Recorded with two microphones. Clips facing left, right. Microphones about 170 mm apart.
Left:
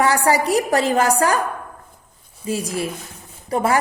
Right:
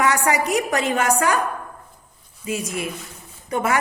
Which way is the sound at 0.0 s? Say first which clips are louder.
Left 3 dB; 30° left (ahead or behind).